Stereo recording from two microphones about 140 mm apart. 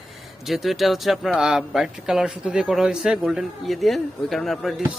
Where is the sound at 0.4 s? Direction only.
Centre (ahead or behind).